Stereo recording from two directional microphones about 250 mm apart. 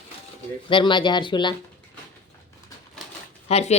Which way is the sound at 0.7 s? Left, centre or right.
Centre.